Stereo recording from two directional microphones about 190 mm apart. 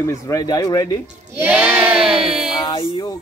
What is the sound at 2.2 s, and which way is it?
Music, 5° right (ahead or behind).